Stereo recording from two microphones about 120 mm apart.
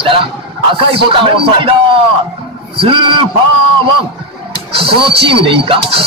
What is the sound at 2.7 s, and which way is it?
Speech, 50° right (ahead or behind).